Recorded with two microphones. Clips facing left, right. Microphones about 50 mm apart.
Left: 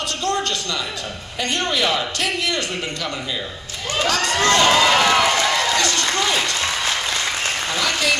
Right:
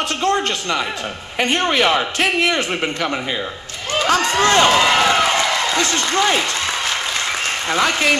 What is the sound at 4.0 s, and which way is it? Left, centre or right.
Run, right.